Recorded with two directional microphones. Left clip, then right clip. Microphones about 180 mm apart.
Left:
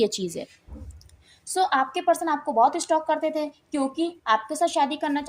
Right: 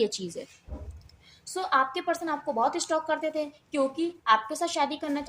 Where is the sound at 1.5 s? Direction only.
30° left (ahead or behind).